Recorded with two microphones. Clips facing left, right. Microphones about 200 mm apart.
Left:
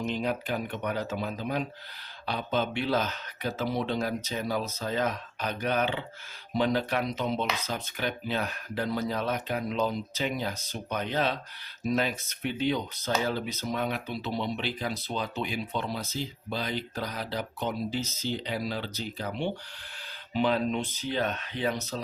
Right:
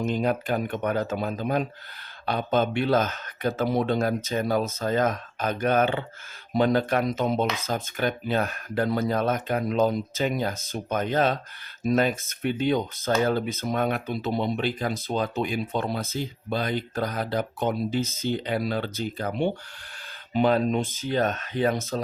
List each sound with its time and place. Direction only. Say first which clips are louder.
0.0 s speech: right 5 dB; 50° right (ahead or behind)